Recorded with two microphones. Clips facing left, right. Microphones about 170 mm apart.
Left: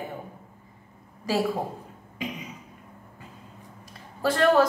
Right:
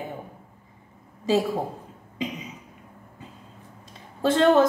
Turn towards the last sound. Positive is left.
turn(degrees=-20)  # may be behind; listen again after turning